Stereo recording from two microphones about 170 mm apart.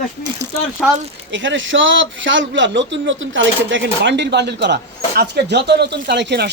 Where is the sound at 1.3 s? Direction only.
90° right.